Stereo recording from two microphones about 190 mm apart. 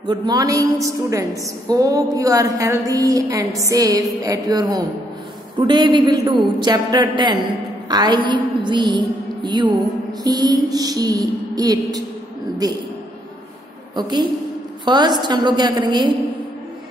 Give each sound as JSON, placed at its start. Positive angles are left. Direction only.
{"t": 0.0, "sound": "a woman's voice", "side_deg": -20}
{"t": 9.4, "sound": "music", "side_deg": -25}
{"t": 10.2, "sound": "a woman's voice", "side_deg": -20}
{"t": 13.9, "sound": "a woman's voice", "side_deg": -20}